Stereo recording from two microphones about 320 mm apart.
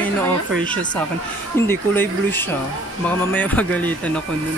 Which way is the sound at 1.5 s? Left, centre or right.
Centre.